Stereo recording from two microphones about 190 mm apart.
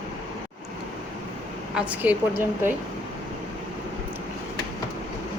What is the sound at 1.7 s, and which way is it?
A woman's voice, 10° right (ahead or behind).